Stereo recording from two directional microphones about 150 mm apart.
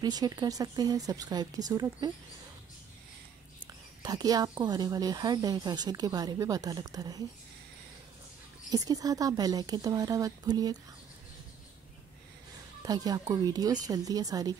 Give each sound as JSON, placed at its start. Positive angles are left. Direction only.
{"t": 0.0, "sound": "a woman's voice", "side_deg": -25}
{"t": 4.0, "sound": "a woman's voice", "side_deg": -25}
{"t": 8.7, "sound": "a woman's voice", "side_deg": -25}
{"t": 12.8, "sound": "a woman's voice", "side_deg": -25}